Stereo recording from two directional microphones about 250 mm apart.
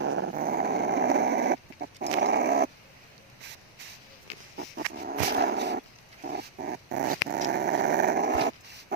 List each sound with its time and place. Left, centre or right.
0.0 s dog: right
0.3 s dog: right
4.6 s dog: right
7.4 s growling: right